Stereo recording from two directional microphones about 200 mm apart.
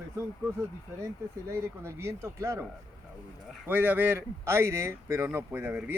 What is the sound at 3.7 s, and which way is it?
Speech, 10° right (ahead or behind).